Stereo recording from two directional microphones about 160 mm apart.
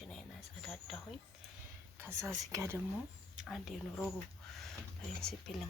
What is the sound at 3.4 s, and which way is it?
Speech, centre (ahead or behind).